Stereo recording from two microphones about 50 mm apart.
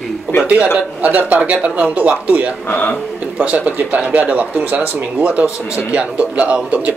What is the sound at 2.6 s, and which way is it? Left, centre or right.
Speech, left.